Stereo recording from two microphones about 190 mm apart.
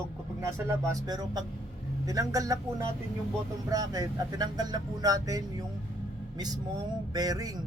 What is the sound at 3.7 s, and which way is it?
Speech, 20° right (ahead or behind).